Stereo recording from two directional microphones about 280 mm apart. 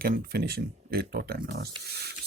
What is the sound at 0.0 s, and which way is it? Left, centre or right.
Speech, right.